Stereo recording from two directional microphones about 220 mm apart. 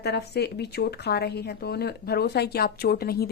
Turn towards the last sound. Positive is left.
turn(degrees=45)  # may be behind; listen again after turning